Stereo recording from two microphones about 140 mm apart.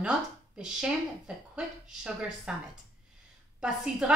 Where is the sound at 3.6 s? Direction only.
5° right (ahead or behind).